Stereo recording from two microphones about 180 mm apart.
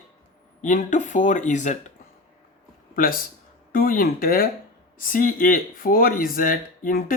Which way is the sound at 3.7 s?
50° left (ahead or behind).